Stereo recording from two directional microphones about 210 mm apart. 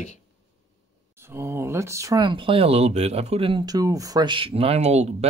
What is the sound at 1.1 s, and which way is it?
Speech, 10° right (ahead or behind).